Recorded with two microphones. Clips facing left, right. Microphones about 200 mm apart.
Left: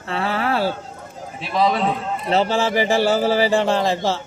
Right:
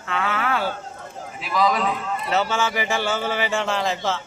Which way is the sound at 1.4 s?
30° left (ahead or behind).